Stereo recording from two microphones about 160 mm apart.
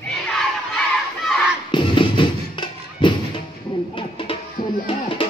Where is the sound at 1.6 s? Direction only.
30° left (ahead or behind).